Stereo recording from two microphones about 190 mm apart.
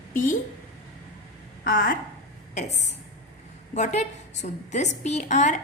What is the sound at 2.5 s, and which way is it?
A woman's voice, 40° left (ahead or behind).